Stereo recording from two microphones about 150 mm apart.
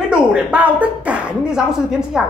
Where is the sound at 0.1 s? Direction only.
5° right (ahead or behind).